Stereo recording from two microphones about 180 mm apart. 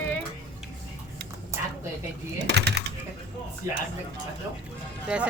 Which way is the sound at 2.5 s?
70° right (ahead or behind).